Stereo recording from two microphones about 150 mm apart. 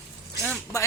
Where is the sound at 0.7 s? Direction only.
20° left (ahead or behind).